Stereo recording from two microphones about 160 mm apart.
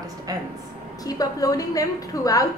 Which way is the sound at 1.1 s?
20° left (ahead or behind).